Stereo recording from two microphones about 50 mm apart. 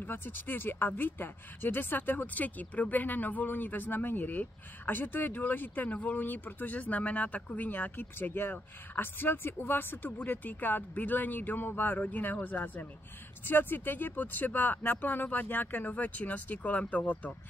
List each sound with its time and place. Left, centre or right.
0.0 s speech: left